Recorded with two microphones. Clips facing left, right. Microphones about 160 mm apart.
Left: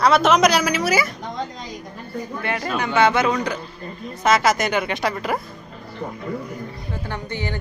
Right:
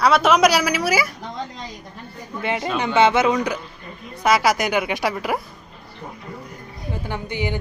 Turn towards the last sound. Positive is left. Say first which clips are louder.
# right 2 dB
turn(degrees=-15)  # may be behind; listen again after turning